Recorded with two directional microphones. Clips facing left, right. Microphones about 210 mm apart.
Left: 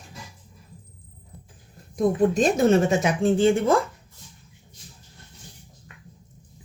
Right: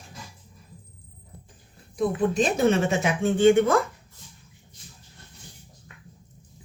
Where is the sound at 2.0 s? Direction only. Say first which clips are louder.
Left 3 dB; 45° left (ahead or behind).